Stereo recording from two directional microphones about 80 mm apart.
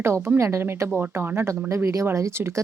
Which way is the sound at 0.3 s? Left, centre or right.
Right.